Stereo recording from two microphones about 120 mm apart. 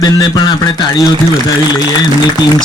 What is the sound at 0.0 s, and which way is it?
A man's voice, 35° left (ahead or behind).